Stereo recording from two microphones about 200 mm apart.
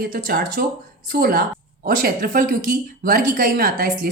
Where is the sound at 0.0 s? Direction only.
45° right (ahead or behind).